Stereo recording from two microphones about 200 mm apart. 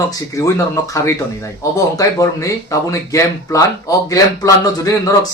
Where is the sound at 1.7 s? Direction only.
15° left (ahead or behind).